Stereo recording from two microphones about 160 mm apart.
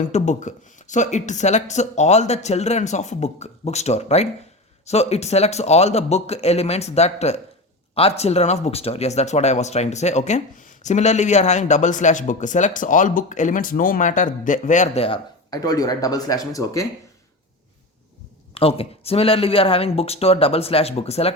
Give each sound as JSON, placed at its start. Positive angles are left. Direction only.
{"t": 0.1, "sound": "speech", "side_deg": 50}
{"t": 15.4, "sound": "speech", "side_deg": 25}
{"t": 18.5, "sound": "speech", "side_deg": 35}